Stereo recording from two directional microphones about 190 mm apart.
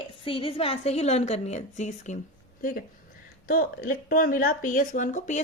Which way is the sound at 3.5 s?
45° left (ahead or behind).